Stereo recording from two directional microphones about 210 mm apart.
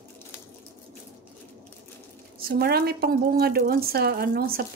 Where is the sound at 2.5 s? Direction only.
50° right (ahead or behind).